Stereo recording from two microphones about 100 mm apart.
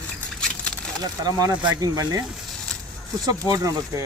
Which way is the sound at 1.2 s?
40° right (ahead or behind).